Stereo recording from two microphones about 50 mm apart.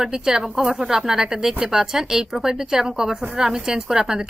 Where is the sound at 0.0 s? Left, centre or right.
Centre.